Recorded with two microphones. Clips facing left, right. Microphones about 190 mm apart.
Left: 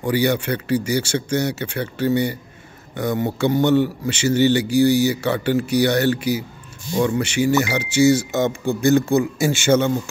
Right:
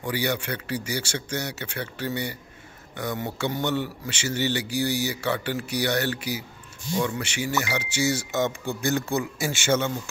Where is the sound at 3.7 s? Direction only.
25° left (ahead or behind).